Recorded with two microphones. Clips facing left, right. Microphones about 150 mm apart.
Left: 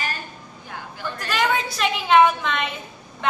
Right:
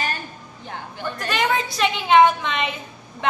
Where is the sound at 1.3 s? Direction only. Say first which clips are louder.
Even; centre (ahead or behind).